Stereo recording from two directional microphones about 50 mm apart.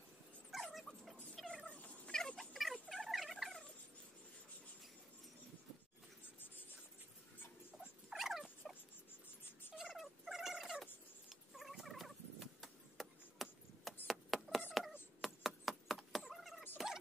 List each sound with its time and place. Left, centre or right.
0.5 s dog: centre
1.7 s cat: left
2.1 s cat: centre
2.5 s a sound: centre
8.1 s dog: centre
9.8 s cat: centre
13.4 s chop: centre
14.0 s a sound: centre
16.2 s cat: centre
16.7 s turkey: centre